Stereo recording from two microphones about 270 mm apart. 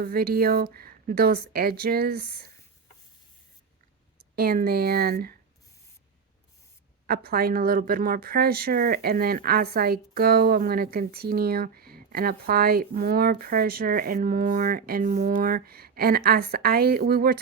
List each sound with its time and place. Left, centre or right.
0.0 s speech: right
4.4 s speech: right
7.1 s speech: right